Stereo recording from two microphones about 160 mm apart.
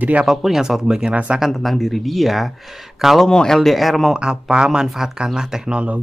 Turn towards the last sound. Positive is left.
turn(degrees=-10)  # may be behind; listen again after turning